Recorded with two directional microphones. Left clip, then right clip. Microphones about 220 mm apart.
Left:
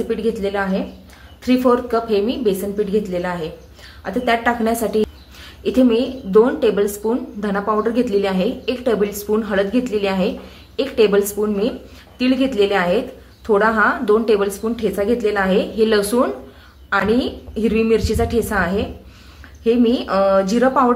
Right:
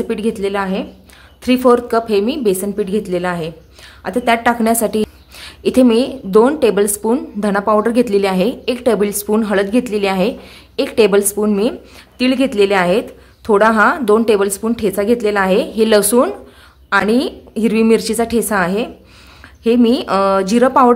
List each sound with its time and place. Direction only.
0.1 s a woman's voice: 45° right (ahead or behind)